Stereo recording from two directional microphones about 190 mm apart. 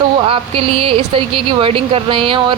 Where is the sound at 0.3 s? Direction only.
30° right (ahead or behind).